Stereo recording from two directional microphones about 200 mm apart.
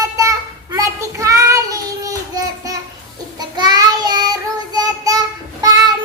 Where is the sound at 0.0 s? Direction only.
15° right (ahead or behind).